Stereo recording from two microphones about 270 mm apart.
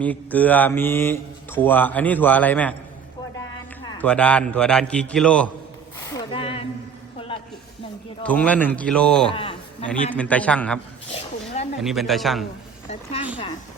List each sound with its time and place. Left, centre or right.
0.0 s speech: centre
4.0 s a man's voice: centre
6.1 s a sound: centre
8.2 s a man's voice: centre
9.3 s a man's voice: centre
9.8 s a man's voice: centre
11.8 s a man's voice: centre
12.9 s a sound: left